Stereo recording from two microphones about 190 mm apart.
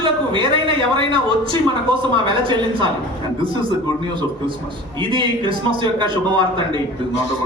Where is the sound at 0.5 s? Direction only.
25° right (ahead or behind).